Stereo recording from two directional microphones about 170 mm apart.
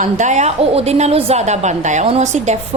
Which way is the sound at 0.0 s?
45° right (ahead or behind).